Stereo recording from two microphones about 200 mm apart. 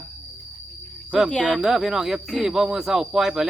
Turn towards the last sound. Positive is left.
turn(degrees=-5)  # may be behind; listen again after turning